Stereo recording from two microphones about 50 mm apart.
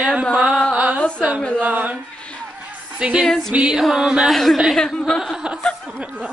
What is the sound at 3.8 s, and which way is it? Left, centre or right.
Speech, centre.